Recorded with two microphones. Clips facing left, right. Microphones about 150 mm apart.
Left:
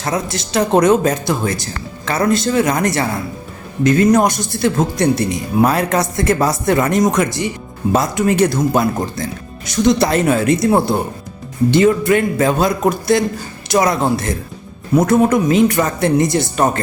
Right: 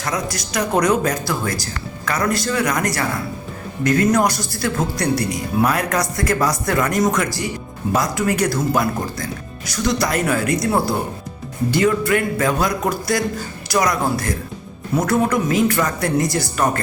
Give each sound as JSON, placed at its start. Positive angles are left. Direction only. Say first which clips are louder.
{"t": 0.0, "sound": "speech", "louder": "left 4 dB", "side_deg": 25}